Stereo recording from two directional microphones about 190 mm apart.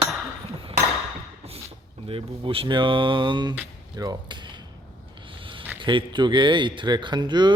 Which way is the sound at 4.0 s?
25° right (ahead or behind).